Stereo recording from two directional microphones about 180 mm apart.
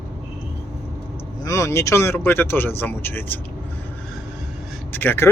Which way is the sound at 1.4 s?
15° left (ahead or behind).